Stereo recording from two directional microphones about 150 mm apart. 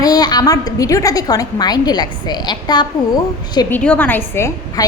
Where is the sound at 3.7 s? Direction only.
10° left (ahead or behind).